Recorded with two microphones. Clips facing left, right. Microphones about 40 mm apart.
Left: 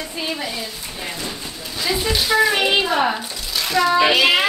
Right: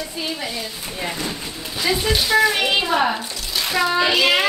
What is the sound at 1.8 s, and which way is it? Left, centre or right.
Speech, centre.